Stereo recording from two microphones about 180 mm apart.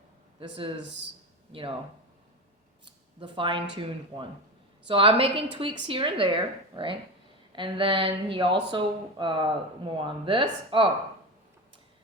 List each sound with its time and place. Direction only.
0.3 s speech: 30° right (ahead or behind)
2.8 s a sound: 30° right (ahead or behind)
3.8 s speech: 25° right (ahead or behind)